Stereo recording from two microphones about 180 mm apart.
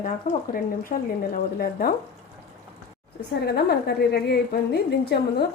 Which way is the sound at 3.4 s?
60° left (ahead or behind).